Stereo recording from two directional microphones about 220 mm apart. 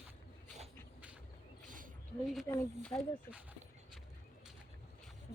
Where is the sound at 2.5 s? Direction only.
10° left (ahead or behind).